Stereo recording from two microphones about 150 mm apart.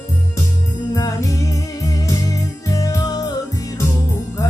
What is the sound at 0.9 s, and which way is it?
Music, 25° left (ahead or behind).